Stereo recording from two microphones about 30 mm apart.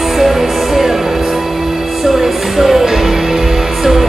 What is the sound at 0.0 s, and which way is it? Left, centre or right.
Music, centre.